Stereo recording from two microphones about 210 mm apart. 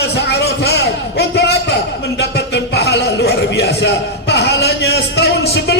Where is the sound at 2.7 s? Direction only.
50° left (ahead or behind).